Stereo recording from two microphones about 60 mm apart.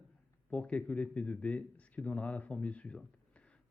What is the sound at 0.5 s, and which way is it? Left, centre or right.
Speech, left.